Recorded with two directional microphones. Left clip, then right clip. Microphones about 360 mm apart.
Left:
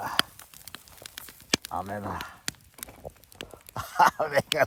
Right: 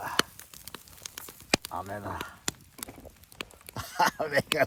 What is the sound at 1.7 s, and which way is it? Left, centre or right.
Speech, left.